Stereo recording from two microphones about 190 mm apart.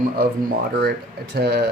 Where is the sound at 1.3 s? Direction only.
55° right (ahead or behind).